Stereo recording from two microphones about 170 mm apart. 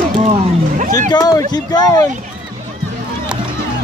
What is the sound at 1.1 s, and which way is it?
Speech, 25° left (ahead or behind).